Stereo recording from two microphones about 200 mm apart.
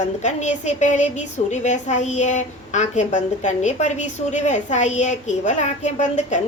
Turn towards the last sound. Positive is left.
turn(degrees=35)  # may be behind; listen again after turning